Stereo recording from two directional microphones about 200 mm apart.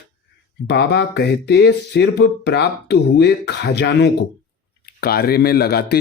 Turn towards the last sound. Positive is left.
turn(degrees=50)  # may be behind; listen again after turning